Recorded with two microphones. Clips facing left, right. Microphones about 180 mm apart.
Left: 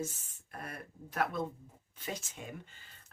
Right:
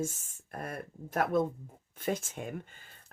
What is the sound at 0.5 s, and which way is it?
Speech, 50° right (ahead or behind).